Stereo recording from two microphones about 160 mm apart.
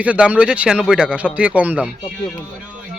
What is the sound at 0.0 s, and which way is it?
Speech, 10° right (ahead or behind).